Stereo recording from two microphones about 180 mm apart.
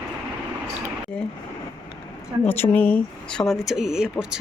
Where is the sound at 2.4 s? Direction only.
10° left (ahead or behind).